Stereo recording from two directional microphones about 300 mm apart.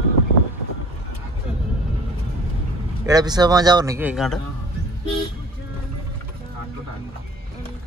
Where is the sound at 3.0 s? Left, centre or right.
Centre.